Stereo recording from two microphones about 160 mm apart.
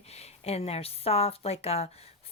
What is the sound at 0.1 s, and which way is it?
A woman's voice, 40° left (ahead or behind).